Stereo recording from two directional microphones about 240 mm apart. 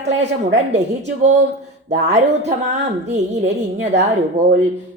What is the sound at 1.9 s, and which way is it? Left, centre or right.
Speech, right.